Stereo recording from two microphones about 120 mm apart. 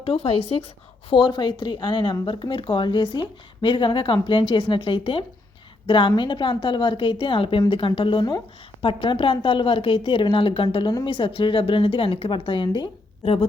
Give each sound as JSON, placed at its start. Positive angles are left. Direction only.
{"t": 0.0, "sound": "a woman's voice", "side_deg": 50}
{"t": 1.1, "sound": "a woman's voice", "side_deg": 35}